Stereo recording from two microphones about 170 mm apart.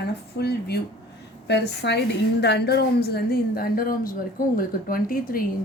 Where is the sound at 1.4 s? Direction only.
80° left; by 5.5 s 60° left (ahead or behind).